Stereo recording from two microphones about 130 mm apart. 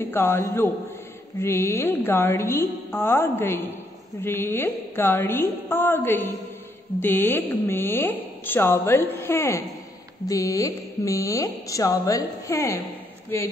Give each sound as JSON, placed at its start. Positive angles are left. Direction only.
{"t": 0.1, "sound": "a woman's voice", "side_deg": 20}